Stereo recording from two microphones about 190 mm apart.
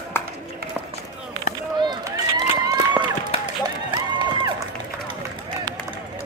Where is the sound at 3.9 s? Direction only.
25° right (ahead or behind).